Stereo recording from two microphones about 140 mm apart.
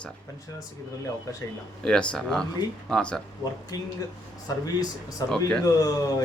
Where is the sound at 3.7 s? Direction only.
25° left (ahead or behind).